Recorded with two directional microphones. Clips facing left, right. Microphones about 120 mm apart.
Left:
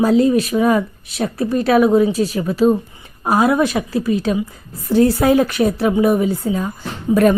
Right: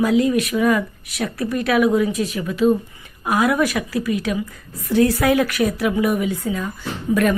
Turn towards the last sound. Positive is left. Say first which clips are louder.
# left 4 dB
turn(degrees=30)  # may be behind; listen again after turning